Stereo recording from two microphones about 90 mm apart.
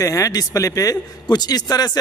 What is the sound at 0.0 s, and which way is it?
A man's voice, 40° left (ahead or behind).